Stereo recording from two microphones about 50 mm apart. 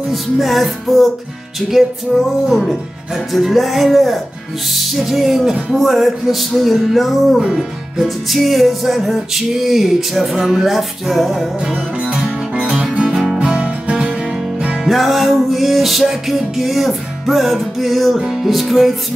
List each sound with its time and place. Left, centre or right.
0.1 s music: centre
3.3 s music: centre
5.8 s music: centre
11.7 s music: centre
14.9 s music: centre